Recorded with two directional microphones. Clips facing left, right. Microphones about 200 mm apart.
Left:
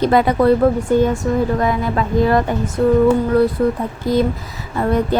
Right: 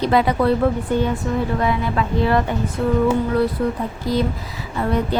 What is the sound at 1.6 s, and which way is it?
Speech, 45° left (ahead or behind).